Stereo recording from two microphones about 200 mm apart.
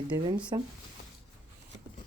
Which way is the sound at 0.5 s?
20° right (ahead or behind).